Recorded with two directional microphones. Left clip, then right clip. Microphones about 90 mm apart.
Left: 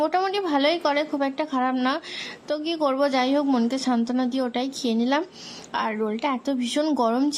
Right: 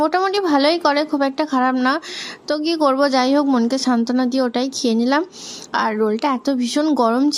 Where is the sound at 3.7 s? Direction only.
40° right (ahead or behind).